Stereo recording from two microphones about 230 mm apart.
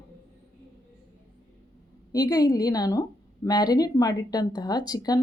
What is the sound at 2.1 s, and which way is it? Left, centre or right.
Speech, centre.